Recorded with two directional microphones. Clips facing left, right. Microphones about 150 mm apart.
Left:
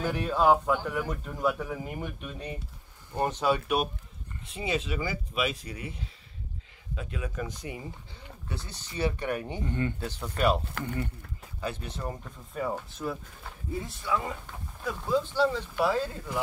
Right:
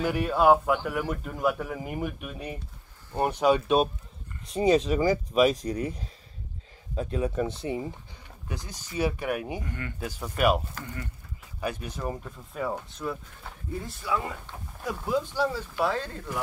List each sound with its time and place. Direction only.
0.0 s speech: 10° right (ahead or behind); by 3.9 s 25° right (ahead or behind)
4.5 s speech: 40° right (ahead or behind)
8.5 s speech: 15° right (ahead or behind)
9.6 s speech: 25° left (ahead or behind)
9.9 s speech: 10° right (ahead or behind)
11.6 s speech: 15° right (ahead or behind)
12.9 s speech: centre (ahead or behind)
14.8 s speech: 10° right (ahead or behind); by 16.2 s 5° left (ahead or behind)